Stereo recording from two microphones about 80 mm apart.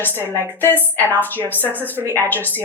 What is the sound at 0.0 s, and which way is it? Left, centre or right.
Speech, left.